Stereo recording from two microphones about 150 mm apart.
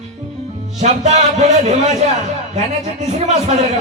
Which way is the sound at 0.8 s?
50° right (ahead or behind).